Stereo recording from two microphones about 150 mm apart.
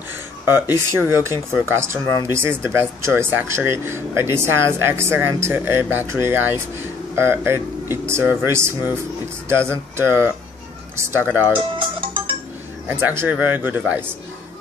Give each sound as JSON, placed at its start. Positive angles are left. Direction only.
{"t": 0.7, "sound": "speech", "side_deg": -20}
{"t": 11.5, "sound": "music", "side_deg": -35}
{"t": 12.8, "sound": "speech", "side_deg": -15}